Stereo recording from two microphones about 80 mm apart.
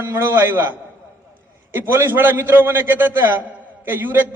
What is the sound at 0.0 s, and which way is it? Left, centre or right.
A man's voice, right.